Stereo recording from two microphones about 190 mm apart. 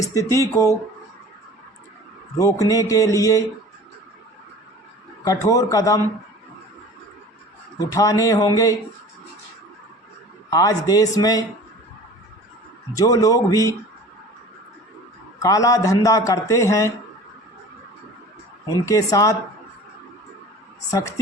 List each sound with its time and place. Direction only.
0.0 s a man's voice: 15° left (ahead or behind)
2.4 s a man's voice: 15° left (ahead or behind)
5.2 s a man's voice: 20° left (ahead or behind)
7.8 s a man's voice: 15° left (ahead or behind)
10.5 s a man's voice: 20° left (ahead or behind)
12.9 s a man's voice: 20° left (ahead or behind)
15.4 s a man's voice: 20° left (ahead or behind)
18.7 s a man's voice: 20° left (ahead or behind)